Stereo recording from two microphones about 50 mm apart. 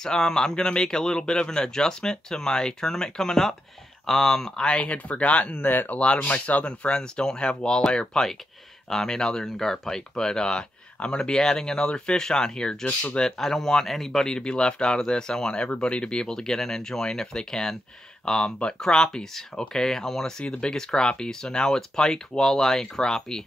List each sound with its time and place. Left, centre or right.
0.0 s speech: centre; by 5.9 s left
5.9 s speech: left
12.8 s speech: left
13.2 s speech: centre